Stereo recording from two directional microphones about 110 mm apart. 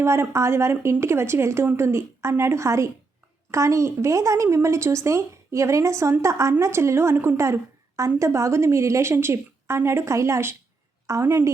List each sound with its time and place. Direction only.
0.0 s a woman's voice: 25° right (ahead or behind)